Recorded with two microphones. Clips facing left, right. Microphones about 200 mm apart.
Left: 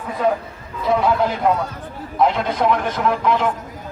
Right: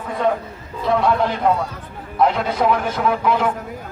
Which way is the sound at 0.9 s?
Centre (ahead or behind).